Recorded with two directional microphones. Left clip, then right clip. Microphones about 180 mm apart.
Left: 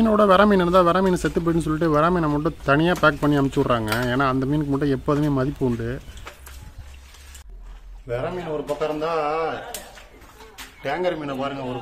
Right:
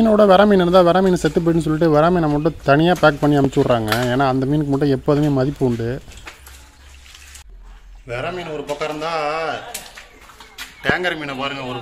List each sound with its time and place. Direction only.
0.0 s speech: 25° right (ahead or behind)
8.1 s a man's voice: centre (ahead or behind)
10.8 s a man's voice: centre (ahead or behind)